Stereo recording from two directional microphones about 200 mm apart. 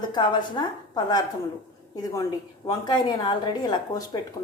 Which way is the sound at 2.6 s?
20° left (ahead or behind).